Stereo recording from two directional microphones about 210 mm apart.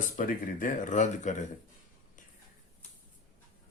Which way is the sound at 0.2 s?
40° left (ahead or behind).